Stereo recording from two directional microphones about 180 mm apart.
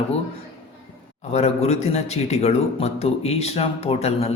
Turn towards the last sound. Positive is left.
turn(degrees=35)  # may be behind; listen again after turning